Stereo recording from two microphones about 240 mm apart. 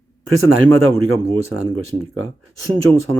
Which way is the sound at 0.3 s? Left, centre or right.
Right.